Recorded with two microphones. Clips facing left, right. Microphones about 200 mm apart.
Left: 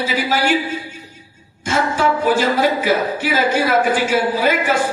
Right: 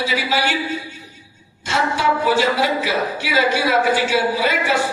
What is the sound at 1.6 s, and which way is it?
A man's voice, 45° left (ahead or behind).